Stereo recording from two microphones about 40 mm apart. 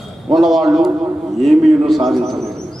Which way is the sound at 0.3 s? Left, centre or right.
Centre.